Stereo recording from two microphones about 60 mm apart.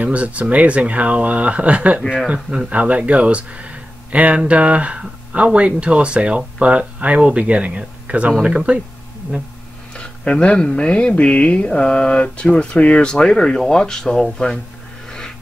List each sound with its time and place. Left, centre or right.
0.0 s speech: right
9.9 s speech: centre
15.0 s a sound: centre